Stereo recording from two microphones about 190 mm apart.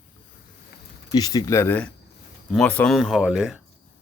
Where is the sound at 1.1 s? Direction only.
20° left (ahead or behind); by 3.6 s 5° right (ahead or behind).